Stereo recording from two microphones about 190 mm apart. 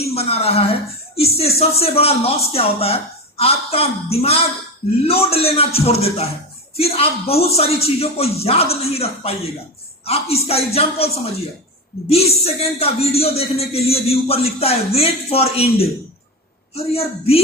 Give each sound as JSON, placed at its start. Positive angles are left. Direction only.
{"t": 0.0, "sound": "speech", "side_deg": 30}
{"t": 12.1, "sound": "speech", "side_deg": 30}